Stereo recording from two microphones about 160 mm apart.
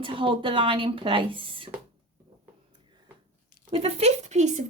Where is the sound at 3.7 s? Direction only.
40° right (ahead or behind).